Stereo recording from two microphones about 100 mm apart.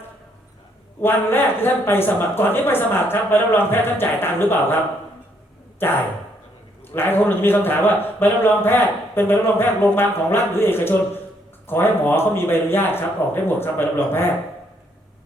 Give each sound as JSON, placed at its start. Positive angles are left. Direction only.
{"t": 1.0, "sound": "speech", "side_deg": 20}
{"t": 5.8, "sound": "speech", "side_deg": 20}